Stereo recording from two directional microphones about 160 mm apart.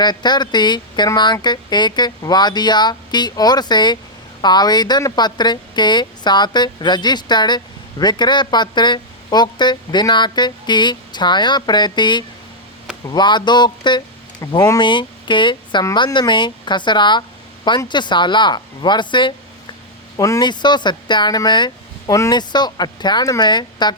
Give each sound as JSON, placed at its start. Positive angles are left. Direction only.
{"t": 0.0, "sound": "speech", "side_deg": 25}